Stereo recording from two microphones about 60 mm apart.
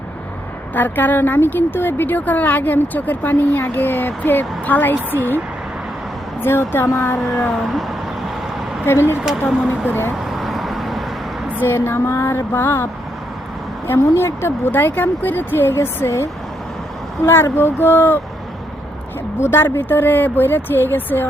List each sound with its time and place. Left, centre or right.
0.7 s a woman's voice: left
6.4 s a woman's voice: left
7.4 s cat: centre
8.9 s a woman's voice: left
10.2 s vehicle: centre
11.6 s a woman's voice: left
14.0 s speech: left
14.7 s a woman's voice: left
19.4 s a woman's voice: left